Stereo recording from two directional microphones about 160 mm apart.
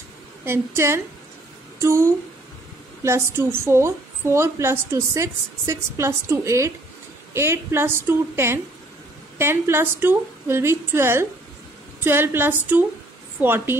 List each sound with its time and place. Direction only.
0.5 s a woman's voice: 15° right (ahead or behind)